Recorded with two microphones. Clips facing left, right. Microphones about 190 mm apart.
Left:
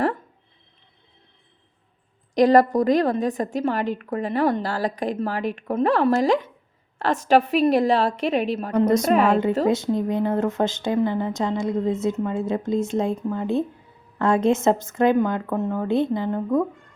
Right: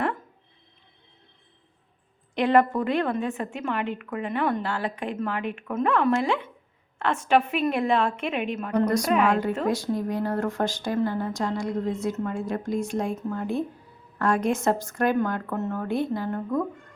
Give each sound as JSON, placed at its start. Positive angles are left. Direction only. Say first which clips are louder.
{"t": 2.3, "sound": "a woman's voice", "louder": "left 5 dB", "side_deg": 40}
{"t": 8.8, "sound": "speech", "louder": "left 5 dB", "side_deg": 20}
{"t": 9.1, "sound": "a woman's voice", "louder": "left 1 dB", "side_deg": 35}
{"t": 9.6, "sound": "speech", "louder": "left 4 dB", "side_deg": 25}